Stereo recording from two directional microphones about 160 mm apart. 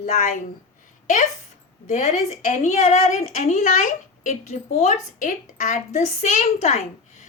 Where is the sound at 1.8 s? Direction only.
45° left (ahead or behind).